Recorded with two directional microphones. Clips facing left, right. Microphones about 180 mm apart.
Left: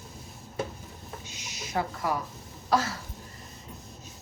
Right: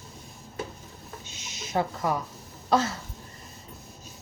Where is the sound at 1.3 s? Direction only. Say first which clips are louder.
Even; 25° right (ahead or behind).